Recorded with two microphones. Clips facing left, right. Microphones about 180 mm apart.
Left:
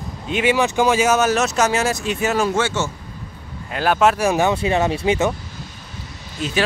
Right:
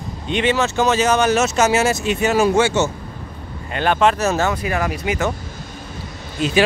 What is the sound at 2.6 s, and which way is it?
Speech, 15° right (ahead or behind).